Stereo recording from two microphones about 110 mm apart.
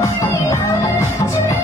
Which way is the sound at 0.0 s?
25° left (ahead or behind).